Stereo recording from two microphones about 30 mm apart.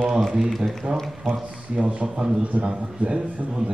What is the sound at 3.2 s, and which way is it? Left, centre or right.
Speech, right.